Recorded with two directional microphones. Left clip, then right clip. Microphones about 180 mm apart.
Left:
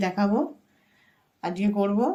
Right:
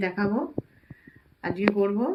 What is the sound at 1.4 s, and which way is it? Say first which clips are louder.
Speech: right 2 dB; 70° left (ahead or behind).